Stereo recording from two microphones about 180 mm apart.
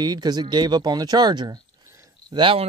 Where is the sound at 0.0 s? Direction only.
25° right (ahead or behind).